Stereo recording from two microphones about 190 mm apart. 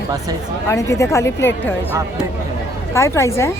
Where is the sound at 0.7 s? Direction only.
15° left (ahead or behind).